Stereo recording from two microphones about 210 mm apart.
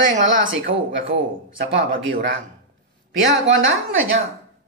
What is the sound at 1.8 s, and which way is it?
Speech, 60° right (ahead or behind).